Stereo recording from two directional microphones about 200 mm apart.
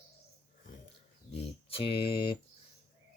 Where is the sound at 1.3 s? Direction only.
30° left (ahead or behind).